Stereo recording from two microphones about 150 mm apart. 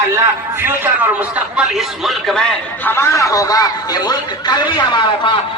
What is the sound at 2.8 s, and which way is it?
A man's voice, 15° left (ahead or behind).